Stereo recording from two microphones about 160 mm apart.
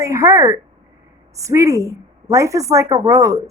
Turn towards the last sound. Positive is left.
turn(degrees=-20)  # may be behind; listen again after turning